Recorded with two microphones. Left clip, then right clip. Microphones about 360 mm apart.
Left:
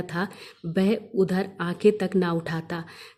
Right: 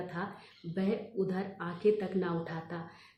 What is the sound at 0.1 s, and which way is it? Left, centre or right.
Speech, left.